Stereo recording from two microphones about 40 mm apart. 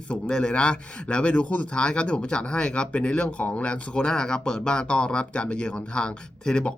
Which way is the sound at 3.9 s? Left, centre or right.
Centre.